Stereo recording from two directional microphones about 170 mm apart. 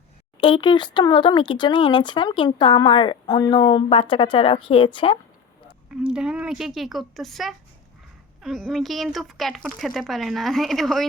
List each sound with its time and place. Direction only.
0.3 s speech: 30° left (ahead or behind)
5.9 s speech: 5° right (ahead or behind)